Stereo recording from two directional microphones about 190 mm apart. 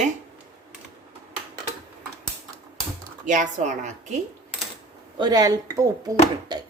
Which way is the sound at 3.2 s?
40° right (ahead or behind).